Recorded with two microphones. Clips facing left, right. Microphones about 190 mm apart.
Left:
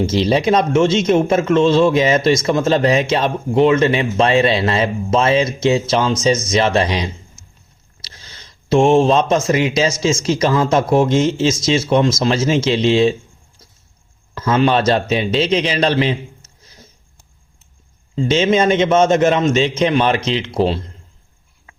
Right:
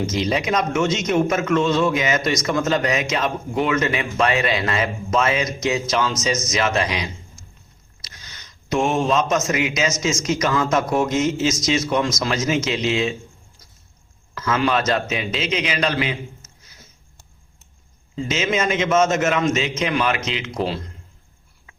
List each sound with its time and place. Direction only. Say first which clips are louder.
0.0 s a man's voice: left 6 dB; 30° left (ahead or behind)
14.3 s a man's voice: left 5 dB; 30° left (ahead or behind)
18.2 s a man's voice: left 7 dB; 30° left (ahead or behind)